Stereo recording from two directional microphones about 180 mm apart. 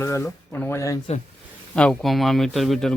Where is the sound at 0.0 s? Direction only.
15° left (ahead or behind).